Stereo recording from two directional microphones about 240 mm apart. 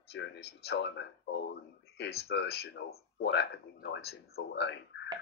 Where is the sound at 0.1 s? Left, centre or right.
Left.